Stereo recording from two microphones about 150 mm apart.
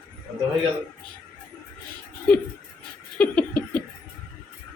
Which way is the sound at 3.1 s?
10° left (ahead or behind).